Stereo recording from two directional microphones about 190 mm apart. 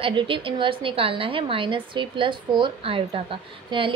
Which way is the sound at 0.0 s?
25° right (ahead or behind).